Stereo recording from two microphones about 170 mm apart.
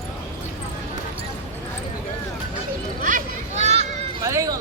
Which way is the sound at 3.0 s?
45° right (ahead or behind).